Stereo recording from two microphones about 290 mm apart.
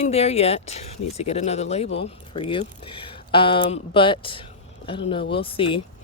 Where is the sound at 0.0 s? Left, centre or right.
Left.